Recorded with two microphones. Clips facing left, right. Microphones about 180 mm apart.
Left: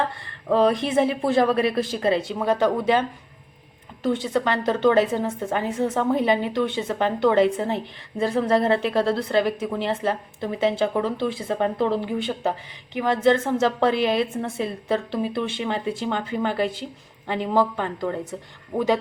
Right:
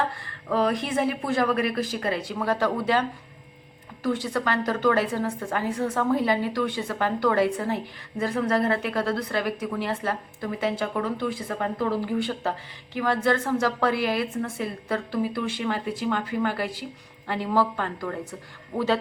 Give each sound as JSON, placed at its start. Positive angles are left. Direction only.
{"t": 0.4, "sound": "a woman's voice", "side_deg": 25}